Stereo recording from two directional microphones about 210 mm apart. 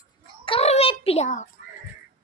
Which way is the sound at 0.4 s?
25° left (ahead or behind).